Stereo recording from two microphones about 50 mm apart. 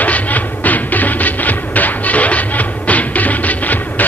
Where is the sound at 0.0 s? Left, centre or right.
Left.